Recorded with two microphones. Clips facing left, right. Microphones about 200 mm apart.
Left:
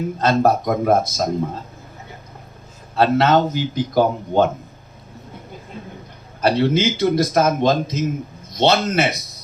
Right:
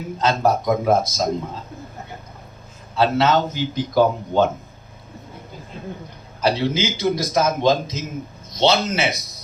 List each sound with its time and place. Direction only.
0.2 s a man's voice: 55° left (ahead or behind)
2.9 s speech: 55° left (ahead or behind)
6.4 s a man's voice: 55° left (ahead or behind)